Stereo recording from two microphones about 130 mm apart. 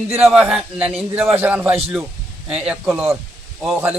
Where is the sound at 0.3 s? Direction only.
5° right (ahead or behind).